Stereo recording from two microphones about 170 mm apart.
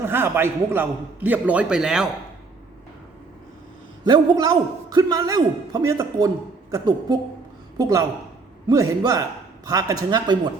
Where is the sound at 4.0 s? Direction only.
25° right (ahead or behind).